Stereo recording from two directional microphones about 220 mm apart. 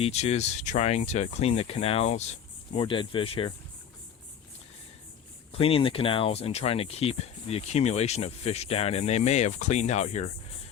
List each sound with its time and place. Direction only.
0.0 s speech: 30° left (ahead or behind)
5.5 s speech: 25° left (ahead or behind)